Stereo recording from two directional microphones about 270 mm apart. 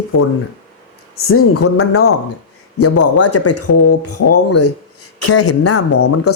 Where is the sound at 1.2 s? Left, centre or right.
Left.